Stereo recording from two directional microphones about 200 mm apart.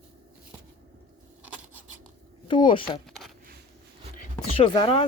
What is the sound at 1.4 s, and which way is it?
Scratch, 10° right (ahead or behind).